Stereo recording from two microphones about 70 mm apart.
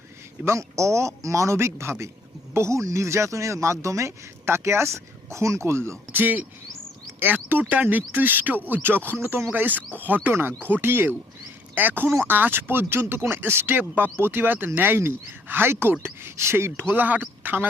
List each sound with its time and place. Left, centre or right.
0.4 s speech: right